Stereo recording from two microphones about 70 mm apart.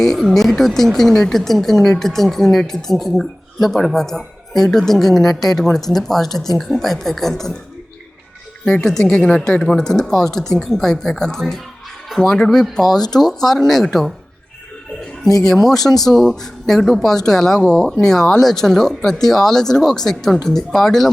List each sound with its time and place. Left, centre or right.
0.0 s speech: centre
8.6 s speech: centre
12.8 s speech: left
13.1 s speech: centre
15.4 s speech: centre